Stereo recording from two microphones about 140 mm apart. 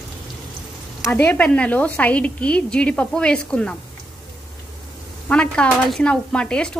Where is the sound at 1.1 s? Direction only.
15° left (ahead or behind).